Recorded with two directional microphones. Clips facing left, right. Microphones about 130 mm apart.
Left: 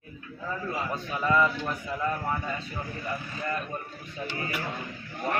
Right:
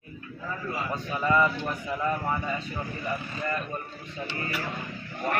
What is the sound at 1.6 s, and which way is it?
Speech, 10° right (ahead or behind).